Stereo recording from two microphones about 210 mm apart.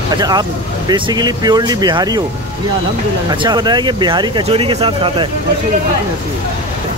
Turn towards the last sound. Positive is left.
turn(degrees=-25)  # may be behind; listen again after turning